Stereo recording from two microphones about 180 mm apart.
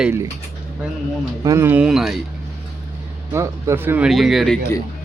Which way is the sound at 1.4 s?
15° right (ahead or behind).